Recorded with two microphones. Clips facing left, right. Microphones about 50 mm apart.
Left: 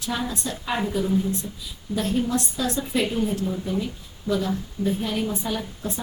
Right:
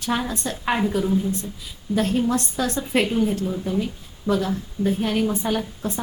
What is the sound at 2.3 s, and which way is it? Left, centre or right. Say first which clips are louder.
Speech: right 2 dB; right.